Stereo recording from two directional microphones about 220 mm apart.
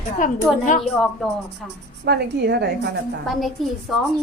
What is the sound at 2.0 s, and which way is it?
Speech, 50° right (ahead or behind).